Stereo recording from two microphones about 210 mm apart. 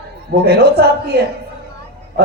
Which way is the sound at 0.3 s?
50° right (ahead or behind).